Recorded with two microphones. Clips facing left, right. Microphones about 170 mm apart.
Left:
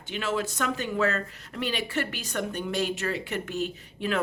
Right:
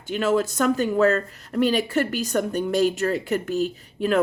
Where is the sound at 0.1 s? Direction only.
45° right (ahead or behind).